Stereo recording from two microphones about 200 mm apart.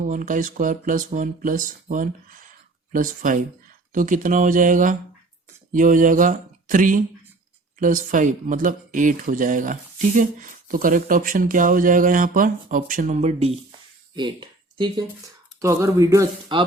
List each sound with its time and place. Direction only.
0.0 s speech: 40° right (ahead or behind); by 16.6 s 20° right (ahead or behind)